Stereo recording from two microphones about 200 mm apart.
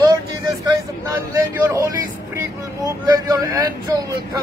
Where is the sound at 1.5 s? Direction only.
15° right (ahead or behind).